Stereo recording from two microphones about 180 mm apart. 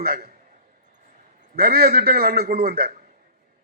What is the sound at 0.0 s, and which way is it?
Speech, 55° right (ahead or behind).